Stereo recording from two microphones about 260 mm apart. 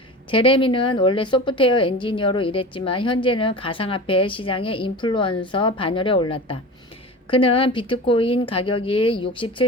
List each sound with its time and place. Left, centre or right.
0.3 s a woman's voice: centre